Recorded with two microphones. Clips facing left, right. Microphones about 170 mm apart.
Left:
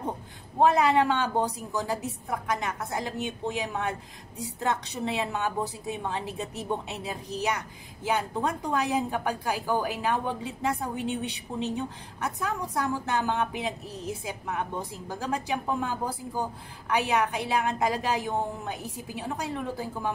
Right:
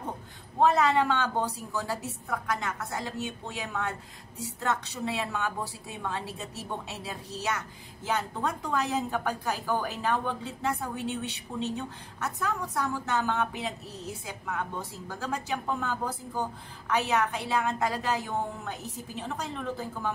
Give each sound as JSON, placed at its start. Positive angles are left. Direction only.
{"t": 0.6, "sound": "a woman's voice", "side_deg": 15}